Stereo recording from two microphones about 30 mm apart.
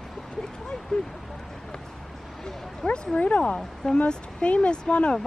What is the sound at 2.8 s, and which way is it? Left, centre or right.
Speech, left.